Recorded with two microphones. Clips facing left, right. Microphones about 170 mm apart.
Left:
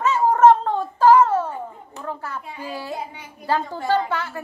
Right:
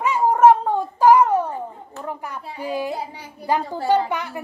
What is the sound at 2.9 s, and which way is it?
Speech, 35° right (ahead or behind).